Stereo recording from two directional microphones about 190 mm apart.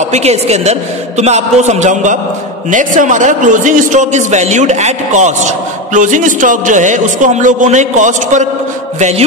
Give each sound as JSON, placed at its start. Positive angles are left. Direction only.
{"t": 0.1, "sound": "a man's voice", "side_deg": -35}